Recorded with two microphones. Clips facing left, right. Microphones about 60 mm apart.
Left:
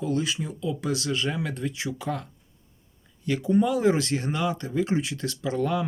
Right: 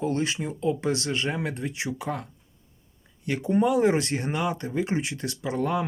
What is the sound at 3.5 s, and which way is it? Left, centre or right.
Speech, right.